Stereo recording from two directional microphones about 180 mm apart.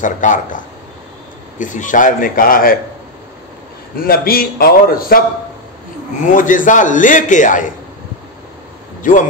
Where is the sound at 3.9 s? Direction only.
55° left (ahead or behind).